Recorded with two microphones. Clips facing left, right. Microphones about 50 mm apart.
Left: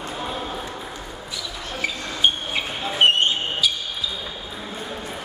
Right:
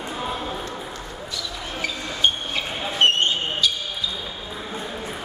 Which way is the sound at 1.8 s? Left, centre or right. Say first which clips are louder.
Left 1 dB; centre.